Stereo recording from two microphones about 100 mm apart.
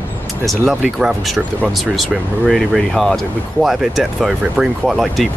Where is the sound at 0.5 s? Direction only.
Centre (ahead or behind).